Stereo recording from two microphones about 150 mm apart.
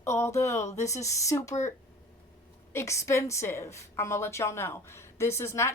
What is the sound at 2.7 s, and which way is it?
Speech, 20° left (ahead or behind).